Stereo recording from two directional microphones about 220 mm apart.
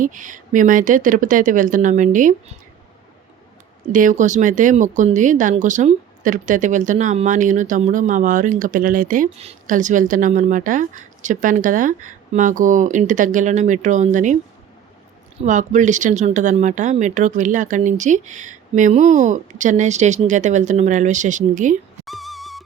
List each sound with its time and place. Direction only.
0.0 s speech: 35° right (ahead or behind)
3.9 s speech: 35° right (ahead or behind)
15.4 s speech: 35° right (ahead or behind)
22.0 s music: centre (ahead or behind)